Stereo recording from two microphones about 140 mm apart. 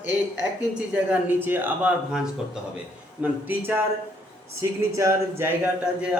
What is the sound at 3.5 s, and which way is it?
Speech, 15° right (ahead or behind).